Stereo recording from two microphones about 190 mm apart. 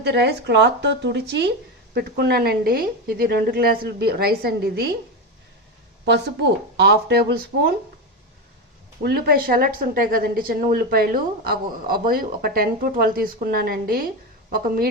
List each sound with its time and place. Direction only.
0.0 s speech: 60° right (ahead or behind)
6.1 s speech: 65° right (ahead or behind)
9.0 s a woman's voice: 55° right (ahead or behind)